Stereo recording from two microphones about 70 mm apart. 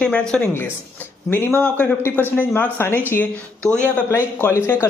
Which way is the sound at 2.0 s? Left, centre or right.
Left.